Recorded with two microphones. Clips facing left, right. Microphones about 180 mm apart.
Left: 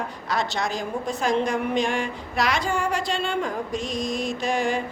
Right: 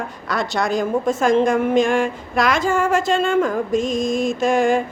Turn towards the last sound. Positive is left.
turn(degrees=-50)  # may be behind; listen again after turning